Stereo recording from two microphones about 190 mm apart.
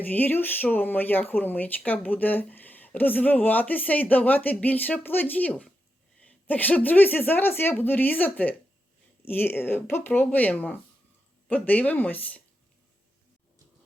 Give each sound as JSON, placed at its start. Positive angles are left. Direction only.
{"t": 0.1, "sound": "speech", "side_deg": 10}